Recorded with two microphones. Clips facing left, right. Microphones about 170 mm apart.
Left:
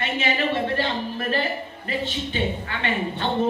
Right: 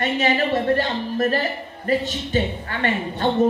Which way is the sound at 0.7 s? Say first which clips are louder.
Right 4 dB; 40° right (ahead or behind).